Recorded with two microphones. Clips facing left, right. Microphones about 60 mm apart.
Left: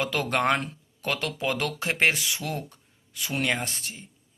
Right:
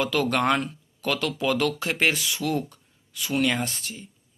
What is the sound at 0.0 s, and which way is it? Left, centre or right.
Speech, left.